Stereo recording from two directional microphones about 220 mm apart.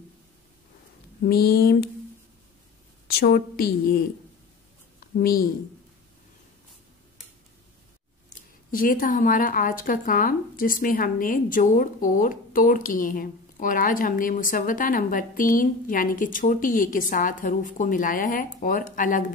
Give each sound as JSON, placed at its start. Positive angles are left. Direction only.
{"t": 1.2, "sound": "a woman's voice", "side_deg": 45}
{"t": 3.1, "sound": "a woman's voice", "side_deg": 45}
{"t": 5.2, "sound": "a woman's voice", "side_deg": 45}
{"t": 8.7, "sound": "speech", "side_deg": 40}